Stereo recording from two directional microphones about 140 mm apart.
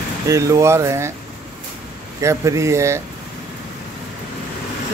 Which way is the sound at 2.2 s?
20° right (ahead or behind).